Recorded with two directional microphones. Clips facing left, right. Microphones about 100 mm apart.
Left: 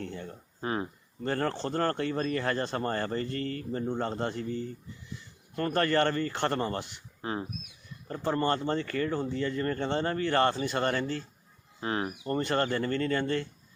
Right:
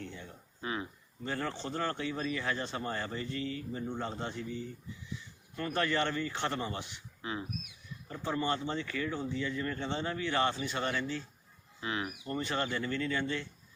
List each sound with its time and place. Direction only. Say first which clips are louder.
0.0 s speech: left 6 dB; 45° left (ahead or behind)
7.2 s speech: left 4 dB; 40° left (ahead or behind)